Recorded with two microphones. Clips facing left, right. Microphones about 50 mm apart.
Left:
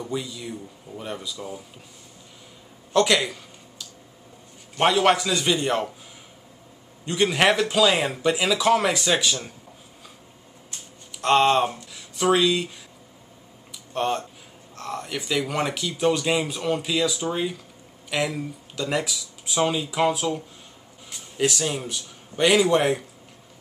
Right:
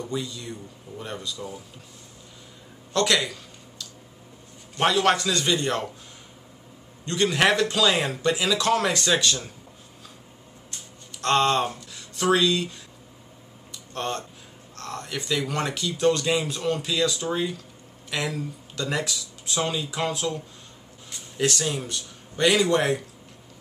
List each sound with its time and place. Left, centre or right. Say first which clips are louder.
0.0 s speech: left 1 dB; centre
2.9 s a sound: left 3 dB; centre
4.7 s speech: left 2 dB; centre
7.1 s speech: left 1 dB; centre
11.1 s speech: left 3 dB; centre
13.9 s speech: left 5 dB; centre